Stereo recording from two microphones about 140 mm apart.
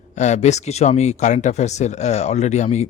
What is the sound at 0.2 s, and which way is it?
Speech, 55° left (ahead or behind).